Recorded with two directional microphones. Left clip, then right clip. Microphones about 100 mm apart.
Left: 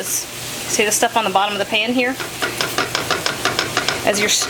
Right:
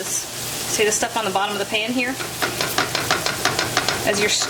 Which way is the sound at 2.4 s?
10° right (ahead or behind).